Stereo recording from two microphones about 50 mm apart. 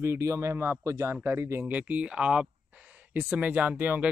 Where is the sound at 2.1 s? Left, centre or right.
Centre.